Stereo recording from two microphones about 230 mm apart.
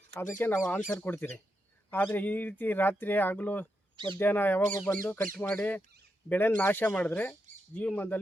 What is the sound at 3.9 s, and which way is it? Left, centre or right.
Speech, right.